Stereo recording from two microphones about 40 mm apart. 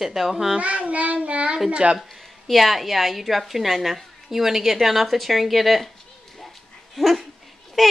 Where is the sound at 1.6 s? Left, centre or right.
Right.